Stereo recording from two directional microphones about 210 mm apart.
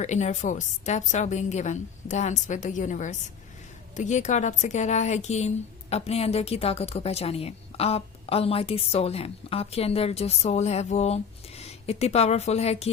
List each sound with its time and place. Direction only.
0.0 s a woman's voice: 35° left (ahead or behind)